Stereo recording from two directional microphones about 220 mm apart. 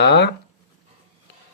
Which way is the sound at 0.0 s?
50° left (ahead or behind).